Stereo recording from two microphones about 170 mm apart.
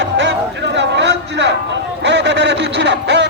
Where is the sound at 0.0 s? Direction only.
90° right.